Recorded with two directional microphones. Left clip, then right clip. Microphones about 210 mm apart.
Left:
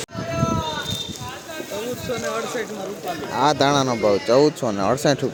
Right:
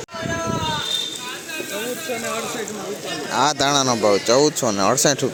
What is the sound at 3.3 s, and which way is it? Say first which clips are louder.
Speech: even; 5° left (ahead or behind).